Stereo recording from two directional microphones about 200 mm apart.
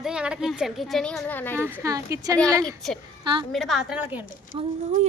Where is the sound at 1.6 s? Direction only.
10° right (ahead or behind).